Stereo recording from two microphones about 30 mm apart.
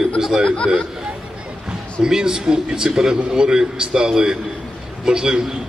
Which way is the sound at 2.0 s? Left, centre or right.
Right.